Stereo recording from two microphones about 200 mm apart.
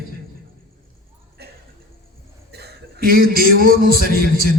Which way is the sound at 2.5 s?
55° right (ahead or behind).